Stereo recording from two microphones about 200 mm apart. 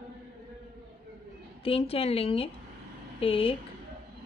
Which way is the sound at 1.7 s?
30° left (ahead or behind).